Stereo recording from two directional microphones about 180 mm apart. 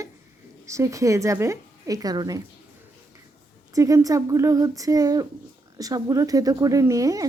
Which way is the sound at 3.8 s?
20° right (ahead or behind).